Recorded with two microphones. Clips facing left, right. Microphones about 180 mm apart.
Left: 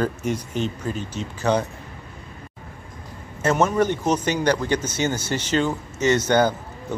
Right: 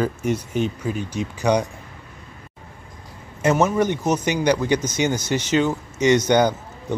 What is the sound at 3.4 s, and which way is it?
Speech, 5° right (ahead or behind).